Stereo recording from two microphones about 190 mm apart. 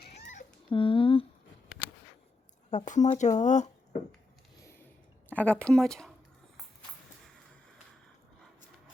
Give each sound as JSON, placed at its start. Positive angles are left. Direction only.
{"t": 0.7, "sound": "a sound", "side_deg": 25}
{"t": 2.6, "sound": "speech", "side_deg": 40}
{"t": 5.3, "sound": "speech", "side_deg": 5}